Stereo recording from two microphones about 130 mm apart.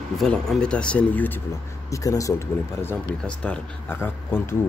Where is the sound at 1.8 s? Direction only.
25° left (ahead or behind).